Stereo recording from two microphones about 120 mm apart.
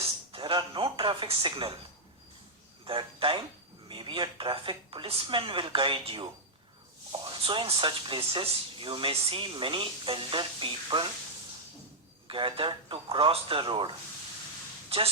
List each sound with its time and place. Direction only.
0.0 s music: 50° right (ahead or behind)
2.8 s speech: 45° right (ahead or behind)
12.3 s speech: 45° right (ahead or behind)